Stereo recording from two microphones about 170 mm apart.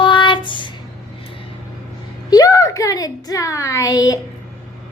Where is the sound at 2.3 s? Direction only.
20° left (ahead or behind).